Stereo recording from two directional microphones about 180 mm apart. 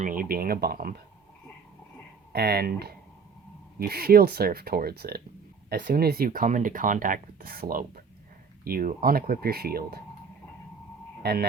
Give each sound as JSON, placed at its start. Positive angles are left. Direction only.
{"t": 0.0, "sound": "speech", "side_deg": -50}
{"t": 2.3, "sound": "speech", "side_deg": -60}
{"t": 11.2, "sound": "speech", "side_deg": -60}